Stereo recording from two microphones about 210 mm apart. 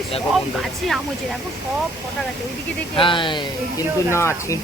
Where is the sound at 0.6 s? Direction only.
Centre (ahead or behind).